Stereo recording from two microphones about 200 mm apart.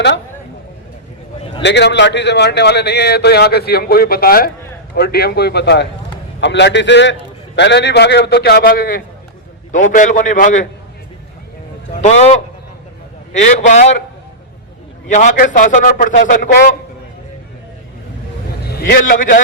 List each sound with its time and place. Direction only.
1.6 s a man's voice: 60° left (ahead or behind); by 10.7 s 40° left (ahead or behind)
11.9 s a man's voice: 35° left (ahead or behind)
15.0 s a man's voice: 35° left (ahead or behind)
18.7 s speech: 50° left (ahead or behind)